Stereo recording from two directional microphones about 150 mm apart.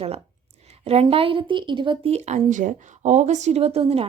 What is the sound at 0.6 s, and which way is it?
A woman's voice, 45° right (ahead or behind).